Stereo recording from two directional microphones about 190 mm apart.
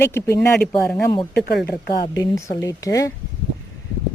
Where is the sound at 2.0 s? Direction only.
15° left (ahead or behind).